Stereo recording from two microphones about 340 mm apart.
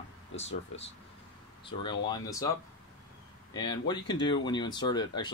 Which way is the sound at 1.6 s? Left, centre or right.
Centre.